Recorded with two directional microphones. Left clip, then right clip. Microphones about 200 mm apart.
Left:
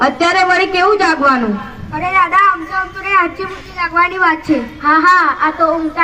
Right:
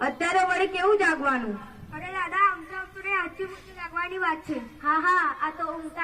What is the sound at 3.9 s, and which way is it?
A man's voice, 20° right (ahead or behind).